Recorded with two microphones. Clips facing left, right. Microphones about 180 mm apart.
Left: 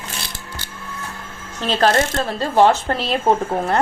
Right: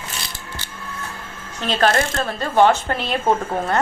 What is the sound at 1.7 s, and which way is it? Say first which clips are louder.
A woman's voice: left 1 dB; 30° left (ahead or behind).